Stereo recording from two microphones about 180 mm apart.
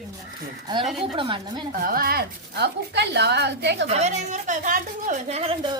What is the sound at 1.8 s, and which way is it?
A woman's voice, 55° right (ahead or behind).